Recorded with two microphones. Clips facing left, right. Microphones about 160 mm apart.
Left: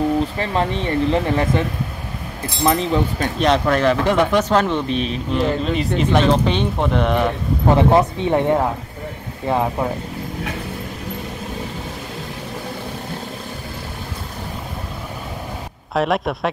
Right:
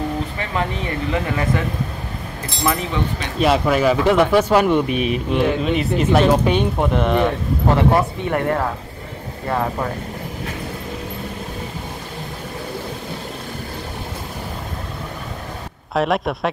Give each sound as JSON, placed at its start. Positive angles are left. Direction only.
{"t": 0.4, "sound": "speech", "side_deg": 30}
{"t": 2.6, "sound": "speech", "side_deg": 30}
{"t": 3.3, "sound": "speech", "side_deg": -5}
{"t": 7.7, "sound": "speech", "side_deg": 20}
{"t": 15.9, "sound": "speech", "side_deg": 0}